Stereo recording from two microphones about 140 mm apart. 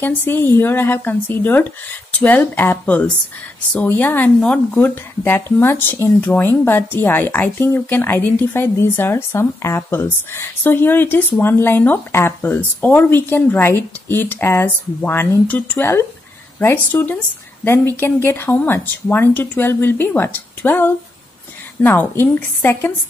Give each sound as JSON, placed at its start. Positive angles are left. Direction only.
{"t": 0.0, "sound": "speech", "side_deg": 15}